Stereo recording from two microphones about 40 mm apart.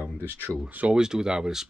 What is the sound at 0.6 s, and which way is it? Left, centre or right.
Speech, right.